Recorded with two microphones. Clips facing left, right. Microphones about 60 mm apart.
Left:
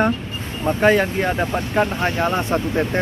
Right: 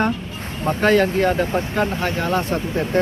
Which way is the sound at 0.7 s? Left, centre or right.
Centre.